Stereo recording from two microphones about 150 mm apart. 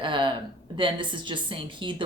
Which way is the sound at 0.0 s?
35° right (ahead or behind).